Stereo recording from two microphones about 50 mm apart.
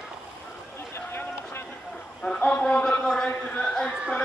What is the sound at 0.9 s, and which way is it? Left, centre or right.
Run, left.